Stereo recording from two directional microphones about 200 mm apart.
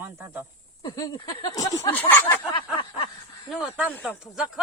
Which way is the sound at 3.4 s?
5° right (ahead or behind).